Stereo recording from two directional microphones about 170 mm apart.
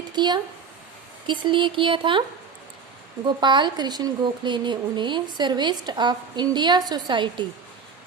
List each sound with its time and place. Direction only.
0.1 s a woman's voice: 25° right (ahead or behind)
3.2 s a woman's voice: 25° right (ahead or behind)